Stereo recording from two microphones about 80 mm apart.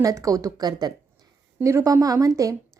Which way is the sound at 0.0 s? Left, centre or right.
Right.